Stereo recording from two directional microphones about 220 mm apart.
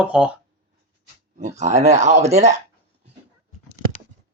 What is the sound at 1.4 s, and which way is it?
Speech, 35° right (ahead or behind).